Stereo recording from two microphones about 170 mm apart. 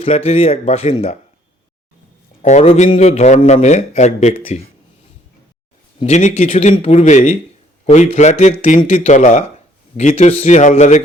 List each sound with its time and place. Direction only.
0.0 s a man's voice: 35° left (ahead or behind)
2.4 s a man's voice: 40° left (ahead or behind)
6.0 s a man's voice: 40° left (ahead or behind)